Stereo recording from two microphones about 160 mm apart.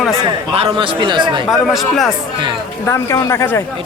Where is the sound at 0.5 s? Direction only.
35° right (ahead or behind).